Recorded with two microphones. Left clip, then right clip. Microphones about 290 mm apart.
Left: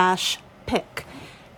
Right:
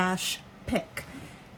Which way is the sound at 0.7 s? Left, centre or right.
Centre.